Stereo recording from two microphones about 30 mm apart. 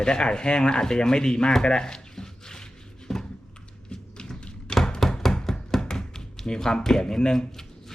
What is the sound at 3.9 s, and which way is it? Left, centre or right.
Tap, left.